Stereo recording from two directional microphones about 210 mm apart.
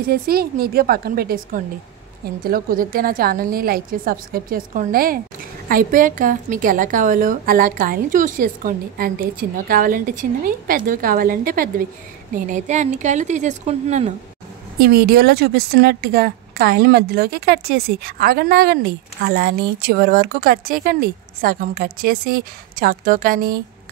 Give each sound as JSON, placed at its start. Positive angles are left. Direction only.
{"t": 0.1, "sound": "a woman's voice", "side_deg": -45}
{"t": 14.8, "sound": "a woman's voice", "side_deg": -45}